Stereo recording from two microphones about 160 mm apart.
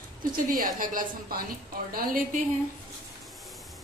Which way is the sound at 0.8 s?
60° right (ahead or behind).